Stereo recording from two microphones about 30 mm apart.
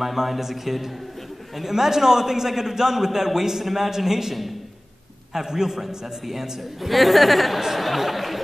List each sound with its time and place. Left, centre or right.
0.0 s a man's voice: centre